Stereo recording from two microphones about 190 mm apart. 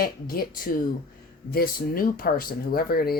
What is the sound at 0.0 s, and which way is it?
Speech, 50° left (ahead or behind).